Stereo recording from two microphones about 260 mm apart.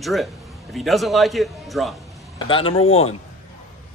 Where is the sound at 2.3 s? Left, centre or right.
Centre.